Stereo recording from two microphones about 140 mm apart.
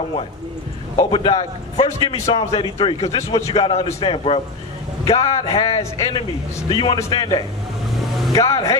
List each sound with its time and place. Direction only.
0.9 s a man's voice: 40° left (ahead or behind)
7.9 s vehicle: centre (ahead or behind)
8.3 s speech: 25° left (ahead or behind)